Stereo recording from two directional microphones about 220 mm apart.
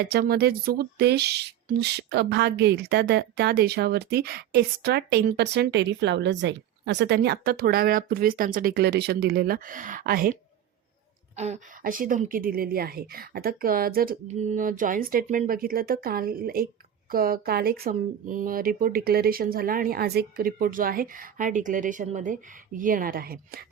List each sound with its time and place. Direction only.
0.0 s speech: 45° right (ahead or behind)
11.3 s speech: 30° right (ahead or behind)